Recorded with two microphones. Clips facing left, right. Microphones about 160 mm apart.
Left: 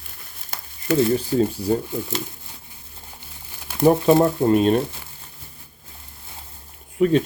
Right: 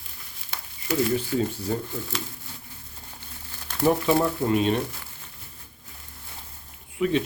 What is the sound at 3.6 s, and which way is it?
Crumpling, 15° left (ahead or behind).